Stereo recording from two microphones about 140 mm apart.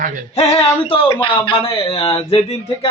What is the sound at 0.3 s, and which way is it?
A man's voice, 50° left (ahead or behind).